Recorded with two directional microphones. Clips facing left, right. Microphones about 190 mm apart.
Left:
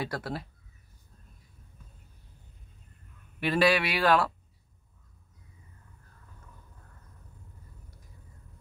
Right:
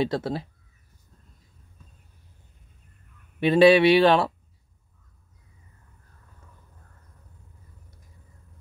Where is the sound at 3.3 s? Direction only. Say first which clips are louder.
Right 9 dB; 25° right (ahead or behind).